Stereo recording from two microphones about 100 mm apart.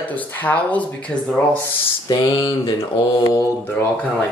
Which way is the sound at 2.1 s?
45° left (ahead or behind).